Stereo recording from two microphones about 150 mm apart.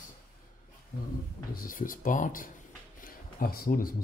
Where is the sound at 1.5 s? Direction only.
65° left (ahead or behind).